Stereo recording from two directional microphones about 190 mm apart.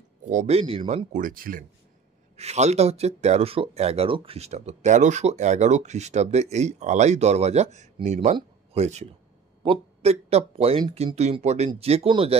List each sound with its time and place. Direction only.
0.2 s speech: 40° right (ahead or behind)
2.3 s speech: 35° right (ahead or behind)
8.4 s a sound: 35° right (ahead or behind)
9.6 s speech: 30° right (ahead or behind)